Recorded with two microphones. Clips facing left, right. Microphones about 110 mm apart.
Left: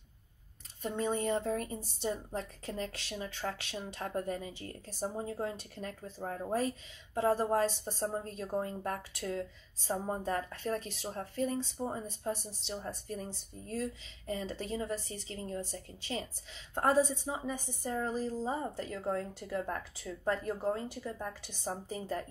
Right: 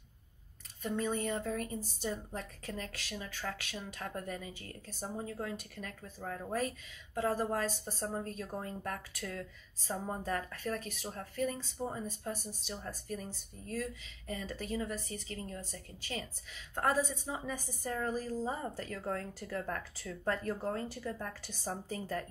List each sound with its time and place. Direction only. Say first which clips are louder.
0.8 s speech: left 2 dB; 30° left (ahead or behind)